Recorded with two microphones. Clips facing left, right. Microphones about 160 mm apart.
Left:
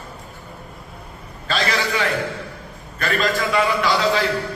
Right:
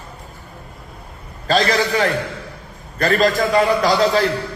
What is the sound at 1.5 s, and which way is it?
A man's voice, 40° right (ahead or behind).